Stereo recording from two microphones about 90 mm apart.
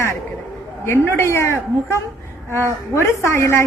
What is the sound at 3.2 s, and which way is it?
Speech, 30° left (ahead or behind).